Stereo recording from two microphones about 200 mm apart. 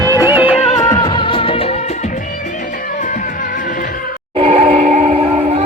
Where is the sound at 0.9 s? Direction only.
25° left (ahead or behind).